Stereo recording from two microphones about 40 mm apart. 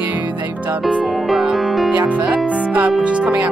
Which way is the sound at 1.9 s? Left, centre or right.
Right.